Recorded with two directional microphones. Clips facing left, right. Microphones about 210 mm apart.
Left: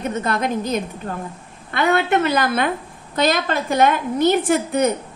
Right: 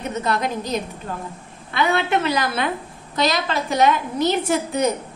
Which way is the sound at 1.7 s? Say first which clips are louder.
Left 2 dB; 50° left (ahead or behind).